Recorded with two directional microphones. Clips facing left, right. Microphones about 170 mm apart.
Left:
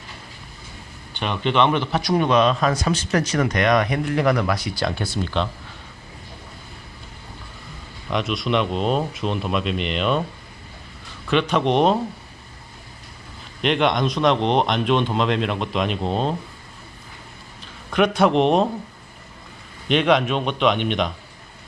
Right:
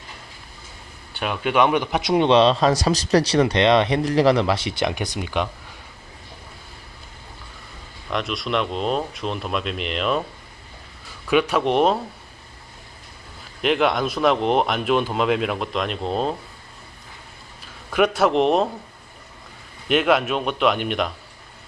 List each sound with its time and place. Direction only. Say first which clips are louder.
1.1 s speech: even; 5° right (ahead or behind)
8.1 s speech: left 2 dB; centre (ahead or behind)
11.3 s speech: even; 10° right (ahead or behind)
13.6 s speech: even; 5° right (ahead or behind)
17.9 s speech: left 1 dB; 5° right (ahead or behind)
19.9 s speech: left 1 dB; 5° right (ahead or behind)